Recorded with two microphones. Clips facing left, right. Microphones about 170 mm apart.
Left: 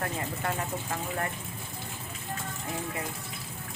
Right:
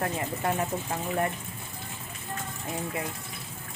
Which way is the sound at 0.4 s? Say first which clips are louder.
Right 5 dB; 25° right (ahead or behind).